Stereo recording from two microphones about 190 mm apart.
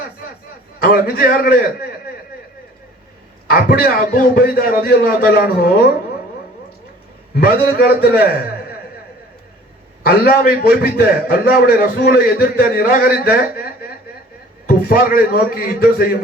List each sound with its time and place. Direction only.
0.9 s a man's voice: 50° left (ahead or behind)
3.4 s a man's voice: 50° left (ahead or behind)
7.3 s a man's voice: 50° left (ahead or behind)
10.0 s a man's voice: 55° left (ahead or behind)